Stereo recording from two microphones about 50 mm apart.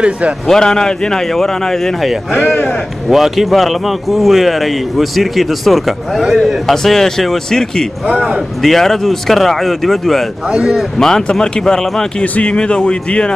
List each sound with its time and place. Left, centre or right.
0.5 s a man's voice: centre
2.3 s speech: left
3.1 s a man's voice: centre
6.7 s a man's voice: centre
10.5 s a man's voice: centre
11.0 s a man's voice: centre